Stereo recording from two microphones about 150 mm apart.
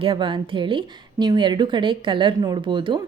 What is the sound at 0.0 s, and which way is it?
A woman's voice, 35° right (ahead or behind).